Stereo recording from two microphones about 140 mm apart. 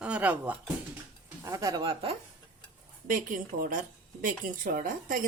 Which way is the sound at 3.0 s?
75° right (ahead or behind).